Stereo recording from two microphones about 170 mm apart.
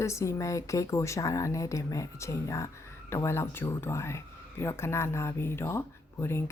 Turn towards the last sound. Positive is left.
turn(degrees=15)  # may be behind; listen again after turning